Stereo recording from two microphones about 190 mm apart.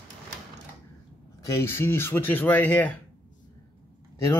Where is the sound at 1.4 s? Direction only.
15° left (ahead or behind).